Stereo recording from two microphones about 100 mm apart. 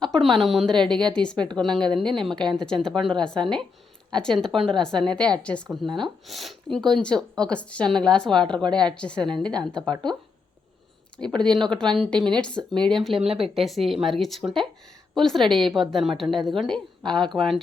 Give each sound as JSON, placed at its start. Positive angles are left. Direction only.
{"t": 0.0, "sound": "a woman's voice", "side_deg": 5}
{"t": 6.0, "sound": "speech", "side_deg": 0}
{"t": 9.9, "sound": "speech", "side_deg": -50}
{"t": 11.2, "sound": "a woman's voice", "side_deg": 10}
{"t": 13.2, "sound": "speech", "side_deg": -70}
{"t": 13.6, "sound": "a woman's voice", "side_deg": 0}